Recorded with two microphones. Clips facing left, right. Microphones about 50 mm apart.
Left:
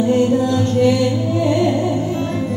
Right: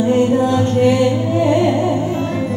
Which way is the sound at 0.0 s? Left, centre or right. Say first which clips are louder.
Right 1 dB; right.